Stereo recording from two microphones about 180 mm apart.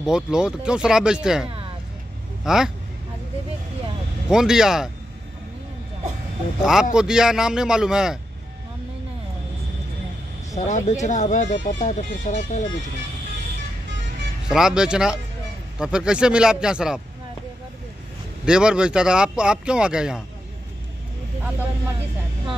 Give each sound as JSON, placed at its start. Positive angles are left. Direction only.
{"t": 0.0, "sound": "speech", "side_deg": -5}
{"t": 4.3, "sound": "speech", "side_deg": -5}
{"t": 6.6, "sound": "speech", "side_deg": -5}
{"t": 10.6, "sound": "speech", "side_deg": 45}
{"t": 14.5, "sound": "speech", "side_deg": -5}
{"t": 18.4, "sound": "speech", "side_deg": -5}